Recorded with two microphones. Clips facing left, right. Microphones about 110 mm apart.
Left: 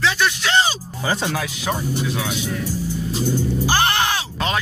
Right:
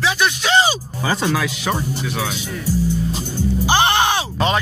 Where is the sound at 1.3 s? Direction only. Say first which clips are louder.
Right 3 dB; 90° right.